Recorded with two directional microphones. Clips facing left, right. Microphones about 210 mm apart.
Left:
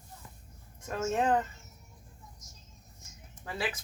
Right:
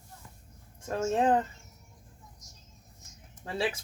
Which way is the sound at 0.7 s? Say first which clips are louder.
Right 3 dB; 30° right (ahead or behind).